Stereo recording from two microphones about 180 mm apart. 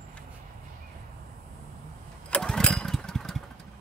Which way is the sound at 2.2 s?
5° left (ahead or behind).